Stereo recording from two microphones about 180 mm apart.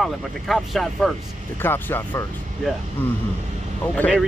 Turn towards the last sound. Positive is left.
turn(degrees=5)  # may be behind; listen again after turning